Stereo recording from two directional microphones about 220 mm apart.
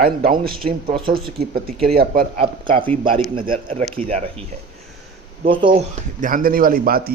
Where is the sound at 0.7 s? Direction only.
25° right (ahead or behind).